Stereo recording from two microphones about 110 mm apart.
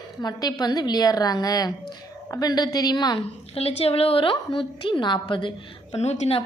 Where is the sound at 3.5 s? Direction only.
65° left (ahead or behind); by 5.5 s 45° left (ahead or behind).